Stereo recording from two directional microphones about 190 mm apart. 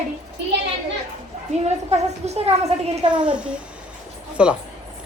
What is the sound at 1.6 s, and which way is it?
A woman's voice, 35° right (ahead or behind).